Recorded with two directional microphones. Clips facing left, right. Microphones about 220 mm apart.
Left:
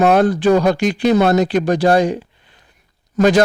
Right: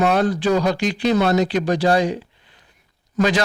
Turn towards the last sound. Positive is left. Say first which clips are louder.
# left 6 dB
turn(degrees=45)  # may be behind; listen again after turning